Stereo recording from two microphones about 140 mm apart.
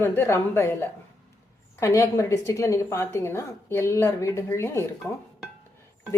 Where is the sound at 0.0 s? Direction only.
15° left (ahead or behind).